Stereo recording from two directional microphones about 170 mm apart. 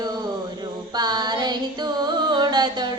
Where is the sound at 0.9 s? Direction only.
25° right (ahead or behind).